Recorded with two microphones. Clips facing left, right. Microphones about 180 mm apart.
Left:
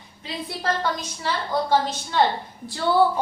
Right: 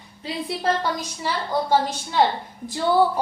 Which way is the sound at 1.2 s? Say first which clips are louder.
Even; 10° right (ahead or behind).